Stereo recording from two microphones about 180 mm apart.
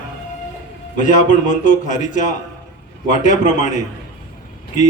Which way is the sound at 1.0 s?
45° left (ahead or behind).